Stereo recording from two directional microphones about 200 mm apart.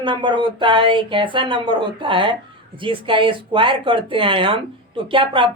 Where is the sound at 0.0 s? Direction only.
25° right (ahead or behind).